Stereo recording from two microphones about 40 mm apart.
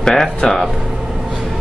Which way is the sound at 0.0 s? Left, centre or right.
Centre.